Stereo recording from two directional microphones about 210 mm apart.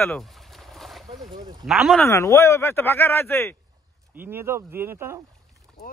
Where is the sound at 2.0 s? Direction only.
15° left (ahead or behind).